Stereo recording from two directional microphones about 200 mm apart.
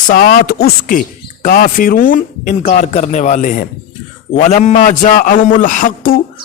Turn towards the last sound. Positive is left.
turn(degrees=45)  # may be behind; listen again after turning